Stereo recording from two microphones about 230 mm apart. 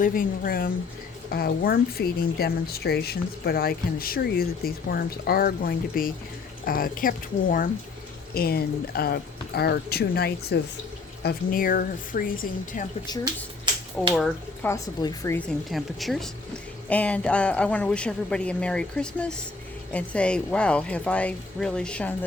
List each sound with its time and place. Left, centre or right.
0.0 s speech: left
13.1 s speech: centre
14.1 s speech: centre
14.7 s speech: centre
15.7 s speech: centre